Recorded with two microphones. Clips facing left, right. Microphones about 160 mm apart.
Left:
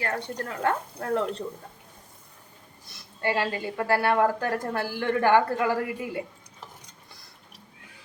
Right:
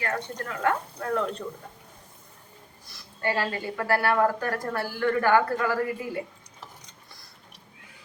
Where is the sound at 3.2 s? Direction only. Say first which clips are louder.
Left 1 dB; 20° left (ahead or behind).